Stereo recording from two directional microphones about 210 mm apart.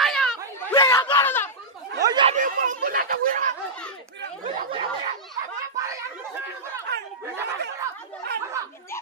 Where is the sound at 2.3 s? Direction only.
40° right (ahead or behind).